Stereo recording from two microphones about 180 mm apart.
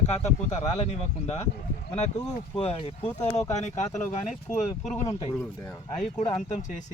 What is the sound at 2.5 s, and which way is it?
Speech, 35° left (ahead or behind).